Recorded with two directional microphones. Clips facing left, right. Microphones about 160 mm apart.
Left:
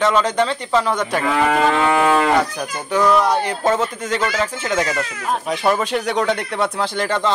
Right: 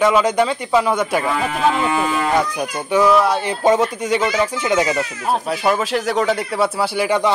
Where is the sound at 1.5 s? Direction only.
70° left (ahead or behind).